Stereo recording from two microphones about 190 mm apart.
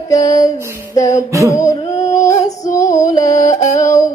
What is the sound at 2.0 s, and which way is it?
Female singing, 15° left (ahead or behind).